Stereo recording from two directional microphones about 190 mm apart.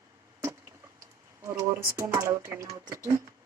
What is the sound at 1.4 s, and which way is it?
Speech, 15° right (ahead or behind).